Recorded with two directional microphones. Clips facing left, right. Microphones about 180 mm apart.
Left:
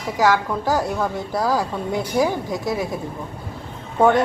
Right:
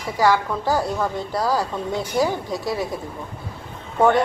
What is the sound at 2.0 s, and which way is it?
Speech, 15° left (ahead or behind).